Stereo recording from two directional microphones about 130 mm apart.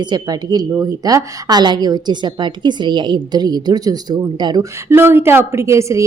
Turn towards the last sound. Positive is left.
turn(degrees=-25)  # may be behind; listen again after turning